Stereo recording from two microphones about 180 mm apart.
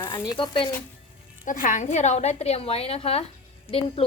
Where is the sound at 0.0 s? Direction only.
25° left (ahead or behind).